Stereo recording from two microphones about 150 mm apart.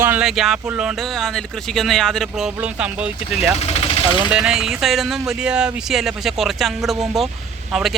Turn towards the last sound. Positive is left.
turn(degrees=0)  # may be behind; listen again after turning